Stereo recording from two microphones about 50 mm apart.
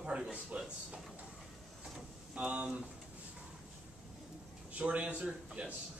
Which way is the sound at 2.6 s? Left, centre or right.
Right.